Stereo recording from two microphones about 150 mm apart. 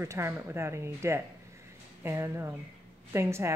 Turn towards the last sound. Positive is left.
turn(degrees=-20)  # may be behind; listen again after turning